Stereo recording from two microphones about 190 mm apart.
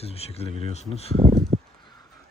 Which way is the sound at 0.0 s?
30° left (ahead or behind).